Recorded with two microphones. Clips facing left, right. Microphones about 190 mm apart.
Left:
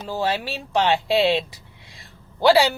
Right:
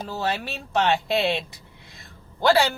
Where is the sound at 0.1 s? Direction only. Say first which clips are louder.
Left 5 dB; 10° left (ahead or behind).